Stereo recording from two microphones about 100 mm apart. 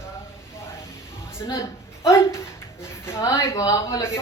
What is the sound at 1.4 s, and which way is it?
A woman's voice, 30° left (ahead or behind).